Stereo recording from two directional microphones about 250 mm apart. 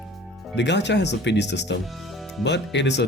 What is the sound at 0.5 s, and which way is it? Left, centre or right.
Speech, left.